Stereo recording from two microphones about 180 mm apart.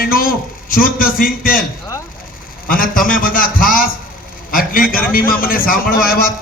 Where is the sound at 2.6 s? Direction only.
50° left (ahead or behind).